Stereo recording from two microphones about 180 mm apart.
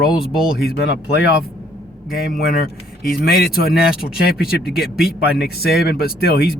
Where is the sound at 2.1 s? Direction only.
60° left (ahead or behind).